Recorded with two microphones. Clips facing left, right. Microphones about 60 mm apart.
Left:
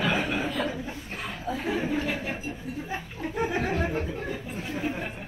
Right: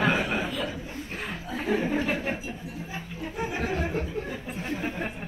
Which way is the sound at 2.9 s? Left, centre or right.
Left.